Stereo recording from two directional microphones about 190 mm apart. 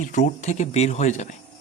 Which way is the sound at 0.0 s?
40° left (ahead or behind).